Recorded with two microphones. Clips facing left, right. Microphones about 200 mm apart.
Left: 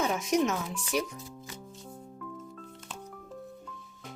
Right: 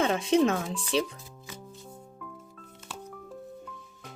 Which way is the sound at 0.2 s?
30° right (ahead or behind).